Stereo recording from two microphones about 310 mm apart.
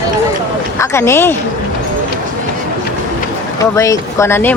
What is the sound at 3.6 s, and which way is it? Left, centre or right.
Speech, centre.